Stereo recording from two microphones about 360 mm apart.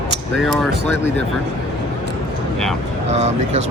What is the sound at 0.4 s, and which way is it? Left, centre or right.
Speech, centre.